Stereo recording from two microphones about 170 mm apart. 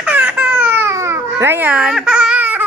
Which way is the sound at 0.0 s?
10° right (ahead or behind).